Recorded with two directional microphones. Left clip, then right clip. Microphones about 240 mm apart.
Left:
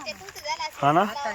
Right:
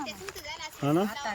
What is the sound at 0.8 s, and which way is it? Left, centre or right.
Speech, centre.